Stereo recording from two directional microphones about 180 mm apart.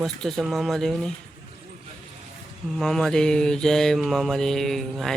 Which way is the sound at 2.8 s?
Centre (ahead or behind).